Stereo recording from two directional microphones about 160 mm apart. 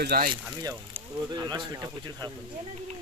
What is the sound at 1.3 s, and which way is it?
Speech, 25° right (ahead or behind).